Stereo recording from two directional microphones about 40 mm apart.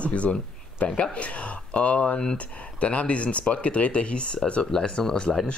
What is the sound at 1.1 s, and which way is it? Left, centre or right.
Speech, left.